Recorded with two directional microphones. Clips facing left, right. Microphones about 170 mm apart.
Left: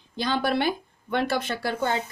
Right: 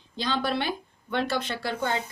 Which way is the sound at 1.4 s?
45° left (ahead or behind).